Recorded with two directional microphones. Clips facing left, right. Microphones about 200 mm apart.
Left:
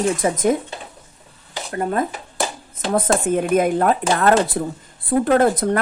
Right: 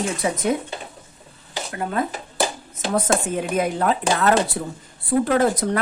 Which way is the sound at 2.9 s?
50° left (ahead or behind).